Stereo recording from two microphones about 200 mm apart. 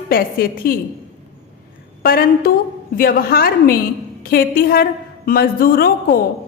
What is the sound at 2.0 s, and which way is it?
A woman's voice, 50° left (ahead or behind).